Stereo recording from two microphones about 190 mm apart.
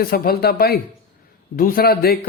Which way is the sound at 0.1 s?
55° left (ahead or behind).